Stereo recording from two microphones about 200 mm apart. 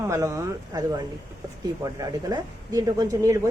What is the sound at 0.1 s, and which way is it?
A man's voice, 15° right (ahead or behind).